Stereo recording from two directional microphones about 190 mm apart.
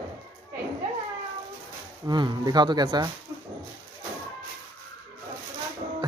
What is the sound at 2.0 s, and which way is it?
Speech, 20° right (ahead or behind).